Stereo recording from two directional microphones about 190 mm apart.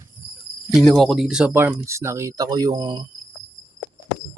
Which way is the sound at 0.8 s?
Centre (ahead or behind).